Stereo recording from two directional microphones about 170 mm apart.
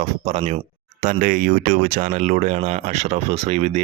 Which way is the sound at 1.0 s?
50° right (ahead or behind).